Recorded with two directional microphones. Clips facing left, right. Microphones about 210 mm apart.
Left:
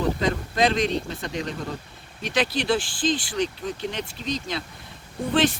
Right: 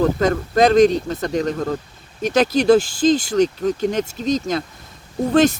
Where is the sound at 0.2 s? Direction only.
45° right (ahead or behind).